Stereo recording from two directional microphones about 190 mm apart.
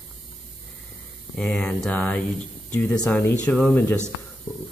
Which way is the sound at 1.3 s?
5° left (ahead or behind).